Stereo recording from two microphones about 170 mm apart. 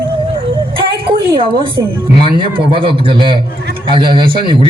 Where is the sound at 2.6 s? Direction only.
30° right (ahead or behind).